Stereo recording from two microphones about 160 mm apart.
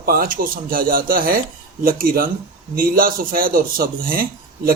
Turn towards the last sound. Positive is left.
turn(degrees=-65)  # may be behind; listen again after turning